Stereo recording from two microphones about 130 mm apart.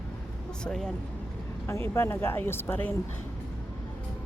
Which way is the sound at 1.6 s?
20° left (ahead or behind).